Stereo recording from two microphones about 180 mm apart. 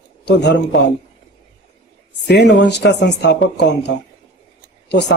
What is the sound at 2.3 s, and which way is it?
Speech, 75° left (ahead or behind).